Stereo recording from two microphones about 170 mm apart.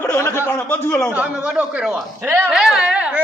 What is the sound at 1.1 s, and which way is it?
Speech, 5° right (ahead or behind).